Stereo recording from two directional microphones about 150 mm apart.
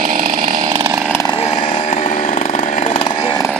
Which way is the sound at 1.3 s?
35° left (ahead or behind).